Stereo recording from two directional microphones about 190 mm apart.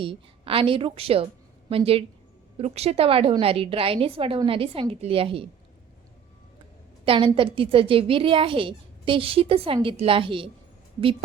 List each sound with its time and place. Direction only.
0.0 s a woman's voice: 30° right (ahead or behind)
7.0 s a woman's voice: 30° right (ahead or behind)